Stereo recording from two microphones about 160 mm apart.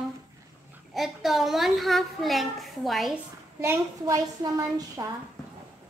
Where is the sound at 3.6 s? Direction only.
20° right (ahead or behind).